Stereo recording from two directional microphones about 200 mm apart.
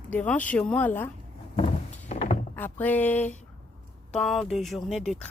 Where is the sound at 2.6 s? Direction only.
10° left (ahead or behind).